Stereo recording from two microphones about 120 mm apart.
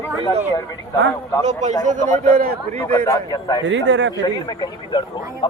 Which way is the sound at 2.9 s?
30° left (ahead or behind).